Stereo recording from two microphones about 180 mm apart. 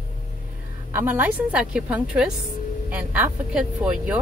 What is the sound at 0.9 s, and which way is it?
Speech, 10° right (ahead or behind).